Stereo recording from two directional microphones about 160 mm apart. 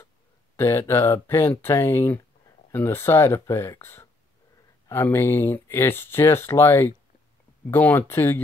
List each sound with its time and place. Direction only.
0.6 s speech: 15° left (ahead or behind)